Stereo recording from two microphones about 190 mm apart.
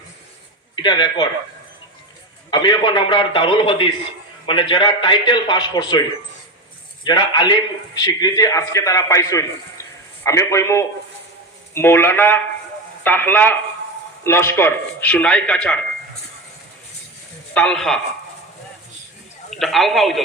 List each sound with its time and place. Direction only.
0.8 s a man's voice: 25° left (ahead or behind)
2.5 s a man's voice: 25° left (ahead or behind)
7.0 s a man's voice: 25° left (ahead or behind); by 15.8 s 5° left (ahead or behind)
17.5 s a man's voice: 5° left (ahead or behind)
19.5 s speech: centre (ahead or behind)